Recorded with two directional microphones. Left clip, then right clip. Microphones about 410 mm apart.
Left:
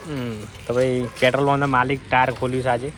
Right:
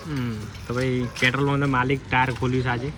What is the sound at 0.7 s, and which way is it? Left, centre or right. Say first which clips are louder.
Speech: left 6 dB; centre.